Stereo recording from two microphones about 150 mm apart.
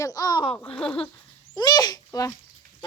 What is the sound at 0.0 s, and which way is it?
Speech, 25° left (ahead or behind).